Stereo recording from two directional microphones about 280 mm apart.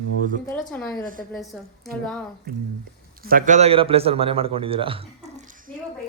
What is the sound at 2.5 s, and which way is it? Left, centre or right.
A man's voice, right.